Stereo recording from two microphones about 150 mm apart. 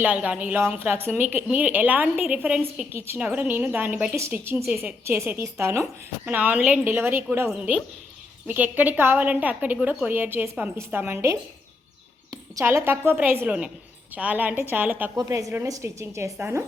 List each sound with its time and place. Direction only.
0.0 s a woman's voice: 10° right (ahead or behind)